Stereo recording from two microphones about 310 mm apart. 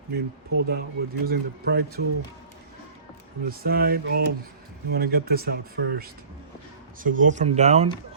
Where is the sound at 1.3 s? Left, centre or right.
Right.